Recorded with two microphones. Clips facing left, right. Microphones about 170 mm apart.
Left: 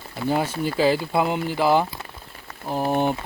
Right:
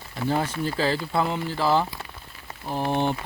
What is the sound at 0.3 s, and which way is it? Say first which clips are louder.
Speech: left 2 dB; 10° left (ahead or behind).